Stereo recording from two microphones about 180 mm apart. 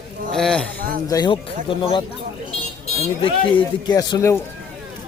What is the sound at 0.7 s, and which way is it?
Speech, 50° right (ahead or behind).